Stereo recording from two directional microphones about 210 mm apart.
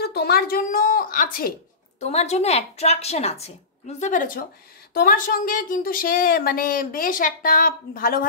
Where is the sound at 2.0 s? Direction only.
30° left (ahead or behind).